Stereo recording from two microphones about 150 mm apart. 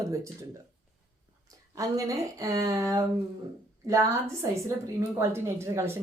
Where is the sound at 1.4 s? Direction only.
20° right (ahead or behind).